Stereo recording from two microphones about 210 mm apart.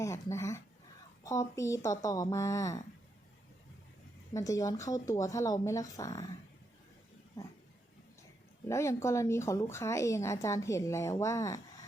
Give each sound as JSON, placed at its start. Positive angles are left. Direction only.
{"t": 0.0, "sound": "speech", "side_deg": 15}
{"t": 4.4, "sound": "speech", "side_deg": 15}
{"t": 8.6, "sound": "speech", "side_deg": 15}